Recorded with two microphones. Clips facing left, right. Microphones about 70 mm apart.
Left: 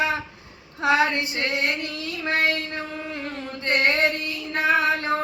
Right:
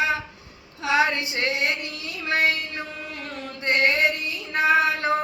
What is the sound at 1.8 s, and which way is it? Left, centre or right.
Music, left.